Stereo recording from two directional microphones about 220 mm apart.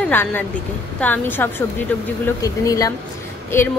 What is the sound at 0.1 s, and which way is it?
A woman's voice, 10° left (ahead or behind).